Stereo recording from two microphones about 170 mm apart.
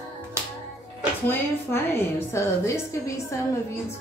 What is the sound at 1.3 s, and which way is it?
A woman's voice, 15° left (ahead or behind).